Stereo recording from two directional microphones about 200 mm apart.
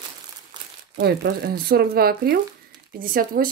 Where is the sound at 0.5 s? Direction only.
20° right (ahead or behind).